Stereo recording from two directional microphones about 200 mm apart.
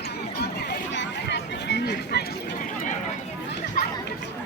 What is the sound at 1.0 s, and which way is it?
Chatter, 60° left (ahead or behind).